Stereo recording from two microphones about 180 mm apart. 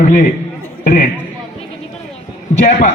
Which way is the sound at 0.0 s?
50° left (ahead or behind).